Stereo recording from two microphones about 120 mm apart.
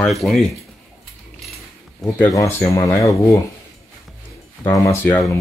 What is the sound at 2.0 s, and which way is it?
Speech, 15° left (ahead or behind).